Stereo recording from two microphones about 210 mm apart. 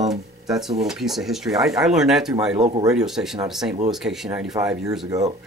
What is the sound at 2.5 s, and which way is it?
Speech, 30° right (ahead or behind).